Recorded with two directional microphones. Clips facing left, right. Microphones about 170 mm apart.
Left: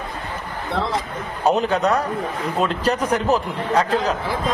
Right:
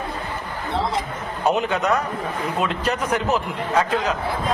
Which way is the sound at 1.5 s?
35° left (ahead or behind).